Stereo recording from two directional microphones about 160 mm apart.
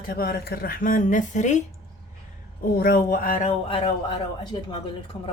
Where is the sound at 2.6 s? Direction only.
80° left; by 3.4 s 65° left (ahead or behind).